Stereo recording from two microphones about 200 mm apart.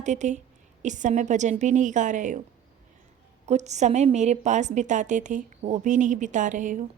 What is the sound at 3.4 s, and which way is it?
A woman's voice, 35° right (ahead or behind).